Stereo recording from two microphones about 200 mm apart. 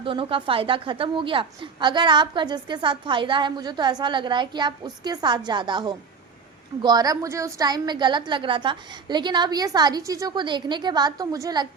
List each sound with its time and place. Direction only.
0.0 s a woman's voice: 25° right (ahead or behind)